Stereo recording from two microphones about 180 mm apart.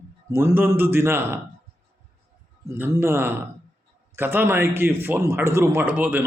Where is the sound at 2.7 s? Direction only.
15° right (ahead or behind).